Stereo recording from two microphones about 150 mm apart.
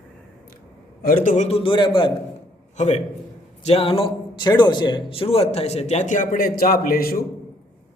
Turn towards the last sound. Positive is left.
turn(degrees=80)